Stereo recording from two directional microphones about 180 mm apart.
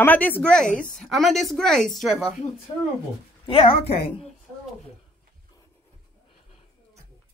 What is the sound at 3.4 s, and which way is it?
Speech, 30° left (ahead or behind).